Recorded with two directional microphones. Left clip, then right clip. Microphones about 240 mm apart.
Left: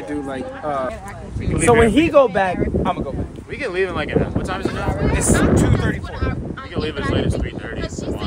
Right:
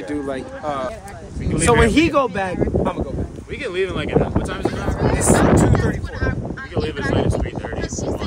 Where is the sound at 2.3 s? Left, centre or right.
Left.